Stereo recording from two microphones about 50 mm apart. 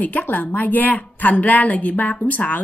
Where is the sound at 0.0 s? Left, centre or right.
Left.